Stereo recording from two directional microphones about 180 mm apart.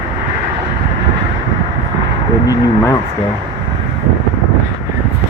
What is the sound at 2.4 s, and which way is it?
Speech, 20° left (ahead or behind).